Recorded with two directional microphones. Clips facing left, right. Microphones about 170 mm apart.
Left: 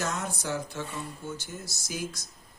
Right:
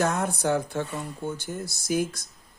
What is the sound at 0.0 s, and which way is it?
Speech, 55° right (ahead or behind).